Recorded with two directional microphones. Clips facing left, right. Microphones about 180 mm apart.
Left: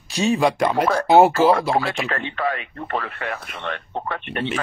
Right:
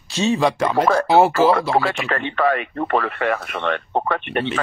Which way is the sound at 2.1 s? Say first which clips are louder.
Right 5 dB; 70° right (ahead or behind).